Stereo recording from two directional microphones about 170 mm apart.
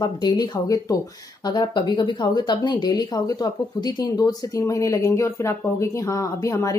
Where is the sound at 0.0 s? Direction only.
25° left (ahead or behind).